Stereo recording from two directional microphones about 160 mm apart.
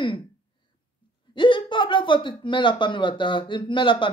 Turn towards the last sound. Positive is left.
turn(degrees=30)  # may be behind; listen again after turning